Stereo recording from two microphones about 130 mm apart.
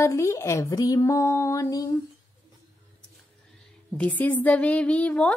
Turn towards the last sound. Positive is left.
turn(degrees=10)  # may be behind; listen again after turning